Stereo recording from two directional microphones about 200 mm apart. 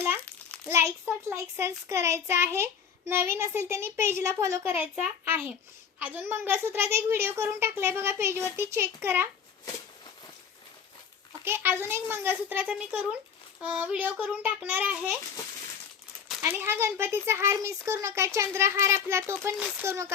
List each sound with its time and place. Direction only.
0.7 s a woman's voice: 15° right (ahead or behind)
11.4 s a woman's voice: 10° right (ahead or behind)
16.4 s a woman's voice: 15° right (ahead or behind)